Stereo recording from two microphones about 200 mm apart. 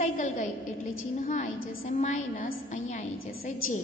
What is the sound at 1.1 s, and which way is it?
A woman's voice, 35° left (ahead or behind).